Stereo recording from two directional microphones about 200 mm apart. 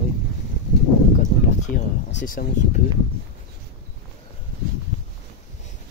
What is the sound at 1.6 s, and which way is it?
Speech, 35° left (ahead or behind).